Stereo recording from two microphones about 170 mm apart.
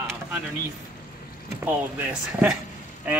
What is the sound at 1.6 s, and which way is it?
Speech, 5° right (ahead or behind).